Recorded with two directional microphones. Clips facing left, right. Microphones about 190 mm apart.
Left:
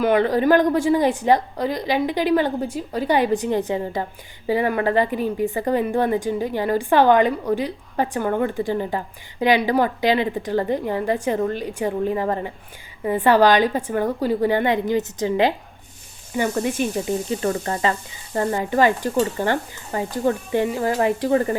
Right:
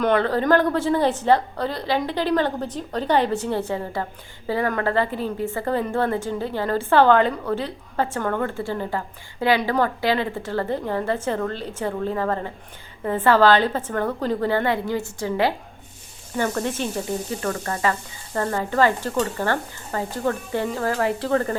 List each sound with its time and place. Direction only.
0.0 s a woman's voice: 15° left (ahead or behind)